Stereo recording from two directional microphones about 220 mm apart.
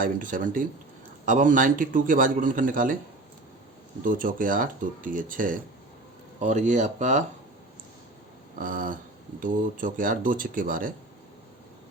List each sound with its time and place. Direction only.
0.0 s a man's voice: 40° right (ahead or behind)
4.0 s a man's voice: 40° right (ahead or behind)
8.5 s a man's voice: 40° right (ahead or behind)